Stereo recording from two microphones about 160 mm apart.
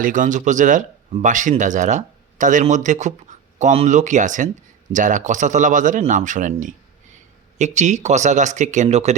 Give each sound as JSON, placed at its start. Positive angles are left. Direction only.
{"t": 0.0, "sound": "speech", "side_deg": -55}